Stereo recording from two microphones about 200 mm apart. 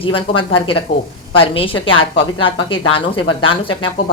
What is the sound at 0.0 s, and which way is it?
A woman's voice, 25° left (ahead or behind).